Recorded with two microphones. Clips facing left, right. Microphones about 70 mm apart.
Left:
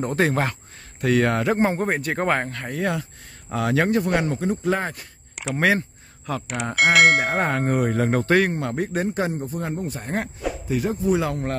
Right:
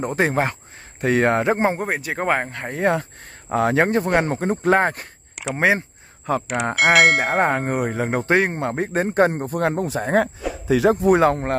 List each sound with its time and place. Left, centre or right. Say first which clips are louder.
0.0 s bell: right 1 dB; right
1.8 s a man's voice: left 1 dB; centre
2.5 s a man's voice: right 5 dB; right
4.1 s speech: right 3 dB; right
5.6 s a sound: right 2 dB; right
6.4 s bell: even; centre; by 9.9 s right
10.4 s a sound: even; centre
10.8 s speech: right 10 dB; right
11.1 s speech: right 6 dB; right